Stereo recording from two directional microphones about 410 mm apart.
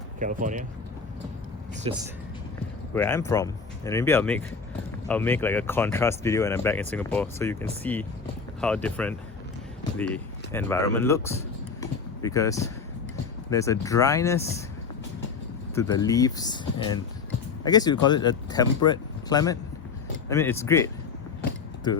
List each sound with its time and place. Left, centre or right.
0.2 s speech: centre
1.9 s speech: centre
2.9 s speech: centre
10.5 s speech: centre
15.7 s speech: centre